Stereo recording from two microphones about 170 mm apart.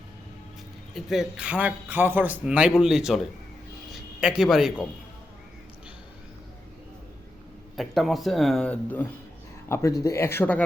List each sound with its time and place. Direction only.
0.9 s a man's voice: centre (ahead or behind)
7.8 s speech: centre (ahead or behind)